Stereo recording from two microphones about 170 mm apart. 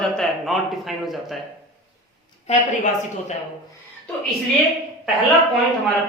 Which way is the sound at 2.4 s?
45° left (ahead or behind).